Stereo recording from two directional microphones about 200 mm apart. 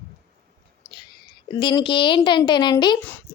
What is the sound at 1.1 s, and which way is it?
A woman's voice, 20° left (ahead or behind).